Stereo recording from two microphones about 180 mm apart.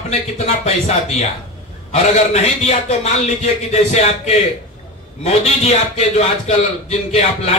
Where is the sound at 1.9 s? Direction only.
40° left (ahead or behind).